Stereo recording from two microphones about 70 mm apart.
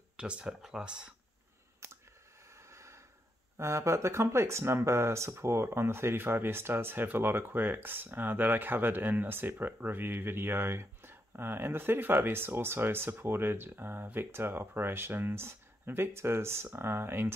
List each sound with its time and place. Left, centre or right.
0.2 s speech: centre
1.8 s a sound: right
3.5 s speech: right